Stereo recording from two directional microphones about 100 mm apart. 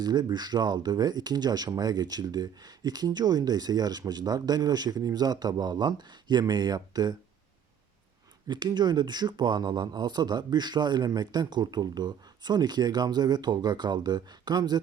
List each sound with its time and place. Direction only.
0.0 s speech: 45° right (ahead or behind)
8.4 s speech: 45° right (ahead or behind)